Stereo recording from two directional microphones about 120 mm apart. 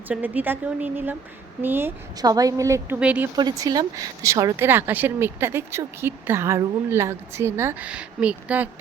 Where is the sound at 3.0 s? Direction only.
10° right (ahead or behind).